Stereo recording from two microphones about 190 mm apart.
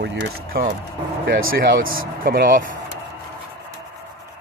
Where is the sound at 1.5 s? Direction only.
55° right (ahead or behind).